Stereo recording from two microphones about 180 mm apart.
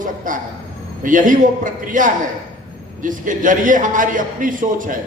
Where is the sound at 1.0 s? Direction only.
50° right (ahead or behind).